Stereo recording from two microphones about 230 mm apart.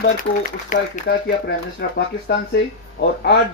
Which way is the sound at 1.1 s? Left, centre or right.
Left.